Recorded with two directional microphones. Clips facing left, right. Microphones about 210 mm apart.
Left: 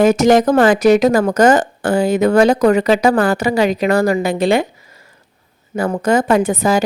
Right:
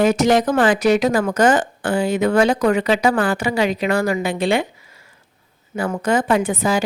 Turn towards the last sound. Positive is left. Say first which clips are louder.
# left 4 dB
turn(degrees=40)  # may be behind; listen again after turning